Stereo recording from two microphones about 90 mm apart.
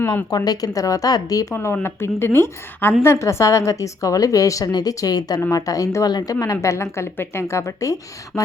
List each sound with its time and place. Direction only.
0.3 s speech: 45° left (ahead or behind)
1.5 s a woman's voice: 25° left (ahead or behind)